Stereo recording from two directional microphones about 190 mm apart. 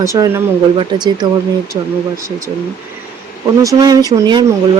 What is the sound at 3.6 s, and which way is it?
Speech, 15° right (ahead or behind).